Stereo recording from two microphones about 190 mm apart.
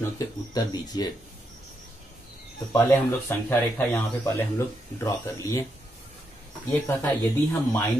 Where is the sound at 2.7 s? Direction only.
10° left (ahead or behind).